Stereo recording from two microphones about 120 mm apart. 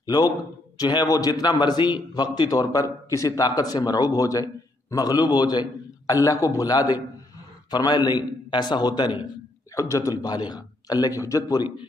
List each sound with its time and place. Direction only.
0.0 s a man's voice: 35° left (ahead or behind)